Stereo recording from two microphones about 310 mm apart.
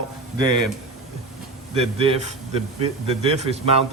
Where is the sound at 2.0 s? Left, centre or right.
Centre.